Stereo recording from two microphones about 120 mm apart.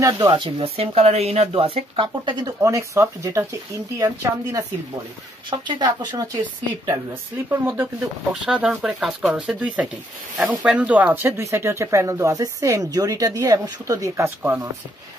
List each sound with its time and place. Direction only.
0.3 s speech: 45° right (ahead or behind); by 4.6 s 25° right (ahead or behind)
5.5 s speech: 40° right (ahead or behind)
7.4 s speech: 15° right (ahead or behind)
8.5 s speech: 5° right (ahead or behind)